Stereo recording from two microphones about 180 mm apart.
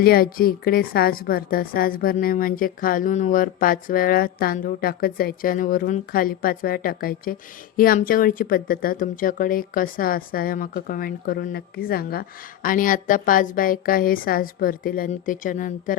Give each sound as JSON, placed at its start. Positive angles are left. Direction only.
{"t": 0.0, "sound": "a woman's voice", "side_deg": 55}